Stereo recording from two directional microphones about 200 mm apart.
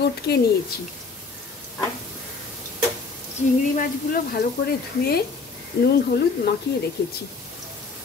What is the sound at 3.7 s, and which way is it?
Speech, 45° left (ahead or behind).